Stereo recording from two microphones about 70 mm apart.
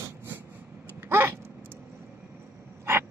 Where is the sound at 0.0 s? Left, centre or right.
Right.